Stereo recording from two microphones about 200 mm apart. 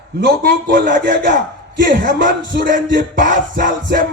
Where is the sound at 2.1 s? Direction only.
55° right (ahead or behind).